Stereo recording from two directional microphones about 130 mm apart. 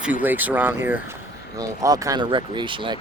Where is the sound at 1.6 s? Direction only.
30° right (ahead or behind).